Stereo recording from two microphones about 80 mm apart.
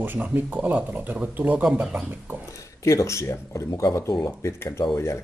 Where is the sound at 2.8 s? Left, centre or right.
Left.